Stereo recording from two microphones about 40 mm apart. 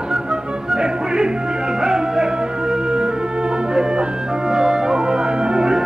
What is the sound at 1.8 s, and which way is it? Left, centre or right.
Music, centre.